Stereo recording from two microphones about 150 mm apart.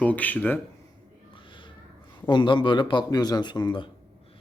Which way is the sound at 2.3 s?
30° left (ahead or behind).